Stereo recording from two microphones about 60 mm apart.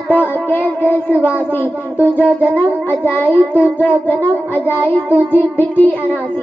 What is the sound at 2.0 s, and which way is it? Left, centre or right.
Child singing, left.